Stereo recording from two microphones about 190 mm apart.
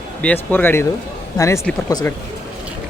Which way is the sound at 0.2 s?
10° left (ahead or behind).